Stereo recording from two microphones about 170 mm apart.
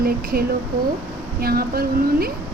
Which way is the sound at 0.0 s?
60° right (ahead or behind).